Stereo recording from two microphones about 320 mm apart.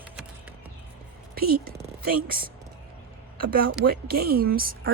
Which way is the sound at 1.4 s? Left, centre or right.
Right.